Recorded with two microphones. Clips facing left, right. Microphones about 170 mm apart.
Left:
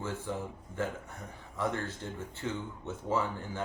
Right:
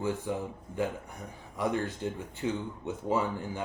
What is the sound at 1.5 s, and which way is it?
Speech, 15° right (ahead or behind).